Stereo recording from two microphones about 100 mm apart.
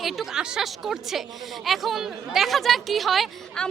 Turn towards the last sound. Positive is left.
turn(degrees=0)  # may be behind; listen again after turning